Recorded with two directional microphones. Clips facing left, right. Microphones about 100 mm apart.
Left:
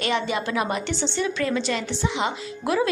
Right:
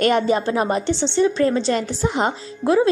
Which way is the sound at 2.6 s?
30° right (ahead or behind).